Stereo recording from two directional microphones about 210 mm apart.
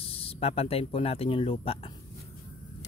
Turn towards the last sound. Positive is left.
turn(degrees=25)  # may be behind; listen again after turning